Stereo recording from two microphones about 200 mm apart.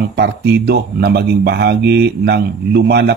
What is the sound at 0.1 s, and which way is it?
Speech, 55° right (ahead or behind).